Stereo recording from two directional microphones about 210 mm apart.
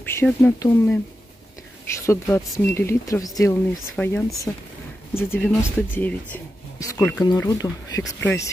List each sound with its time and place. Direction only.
0.0 s speech: 10° left (ahead or behind)
3.9 s speech: 5° left (ahead or behind)